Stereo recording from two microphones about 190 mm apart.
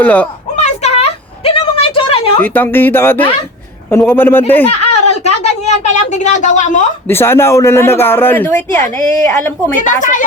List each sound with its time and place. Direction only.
0.0 s speech: 10° left (ahead or behind)
0.6 s a sound: 35° left (ahead or behind)
2.4 s speech: 10° left (ahead or behind)
4.6 s a sound: 35° left (ahead or behind)
7.1 s speech: 10° left (ahead or behind)
9.7 s speech: 45° left (ahead or behind)